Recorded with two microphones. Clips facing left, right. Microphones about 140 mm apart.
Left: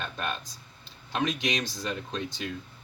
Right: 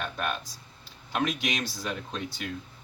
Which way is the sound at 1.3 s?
5° right (ahead or behind).